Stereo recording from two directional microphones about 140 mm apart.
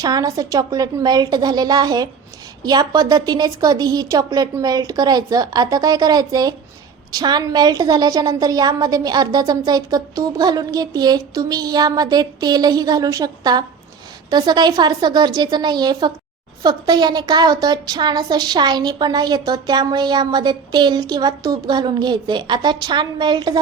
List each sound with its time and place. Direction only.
0.0 s a woman's voice: 25° right (ahead or behind)